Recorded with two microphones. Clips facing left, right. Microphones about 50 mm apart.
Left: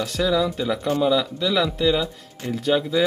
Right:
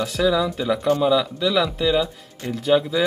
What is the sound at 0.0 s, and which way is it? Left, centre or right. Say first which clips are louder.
Speech: right 1 dB; centre.